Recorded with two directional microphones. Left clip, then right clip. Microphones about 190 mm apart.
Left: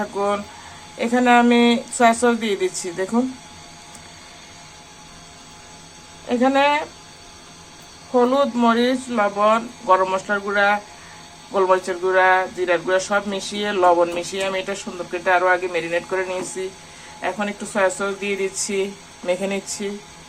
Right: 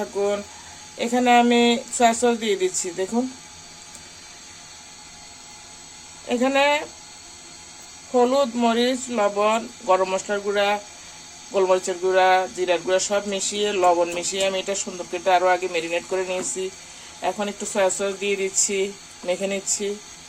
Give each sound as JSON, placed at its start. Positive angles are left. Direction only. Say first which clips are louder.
{"t": 0.9, "sound": "speech", "louder": "left 2 dB", "side_deg": -30}
{"t": 6.2, "sound": "speech", "louder": "left 2 dB", "side_deg": -30}
{"t": 8.1, "sound": "speech", "louder": "left 2 dB", "side_deg": -25}